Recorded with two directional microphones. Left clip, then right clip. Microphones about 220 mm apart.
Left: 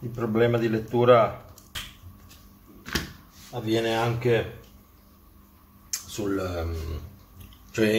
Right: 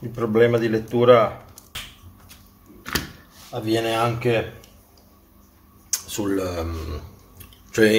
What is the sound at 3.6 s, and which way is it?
Speech, 30° right (ahead or behind).